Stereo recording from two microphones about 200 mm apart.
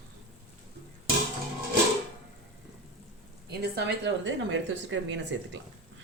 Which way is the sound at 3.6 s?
55° right (ahead or behind).